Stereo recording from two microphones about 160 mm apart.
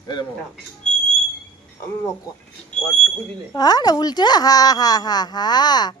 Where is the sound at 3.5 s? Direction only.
25° left (ahead or behind).